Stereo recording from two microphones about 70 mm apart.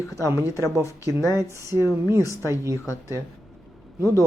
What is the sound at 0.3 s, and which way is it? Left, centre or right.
Speech, right.